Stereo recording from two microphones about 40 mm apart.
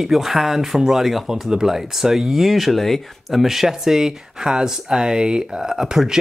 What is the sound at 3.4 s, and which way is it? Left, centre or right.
Speech, centre.